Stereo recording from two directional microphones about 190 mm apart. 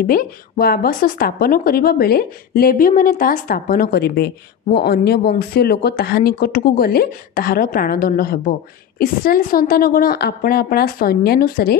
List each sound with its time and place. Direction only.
0.0 s speech: 50° left (ahead or behind)